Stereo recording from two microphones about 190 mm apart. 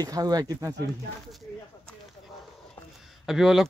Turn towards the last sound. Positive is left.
turn(degrees=0)  # may be behind; listen again after turning